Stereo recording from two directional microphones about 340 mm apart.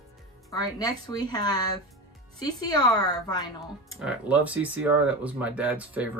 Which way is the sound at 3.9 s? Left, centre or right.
Centre.